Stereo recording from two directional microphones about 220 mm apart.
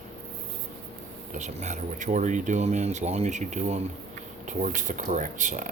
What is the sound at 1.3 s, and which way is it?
Speech, 30° right (ahead or behind).